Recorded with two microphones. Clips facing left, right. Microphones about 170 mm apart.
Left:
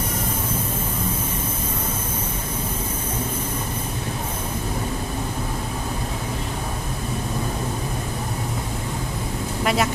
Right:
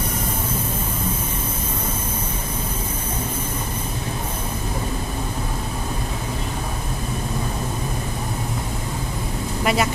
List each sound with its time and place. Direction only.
9.6 s speech: 5° right (ahead or behind)